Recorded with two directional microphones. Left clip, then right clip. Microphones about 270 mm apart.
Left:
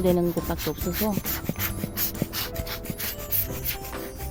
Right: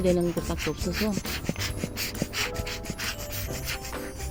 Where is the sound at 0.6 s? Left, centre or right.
Centre.